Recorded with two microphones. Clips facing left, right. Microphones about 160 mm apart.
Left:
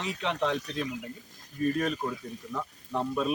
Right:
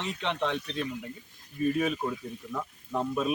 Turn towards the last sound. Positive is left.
turn(degrees=0)  # may be behind; listen again after turning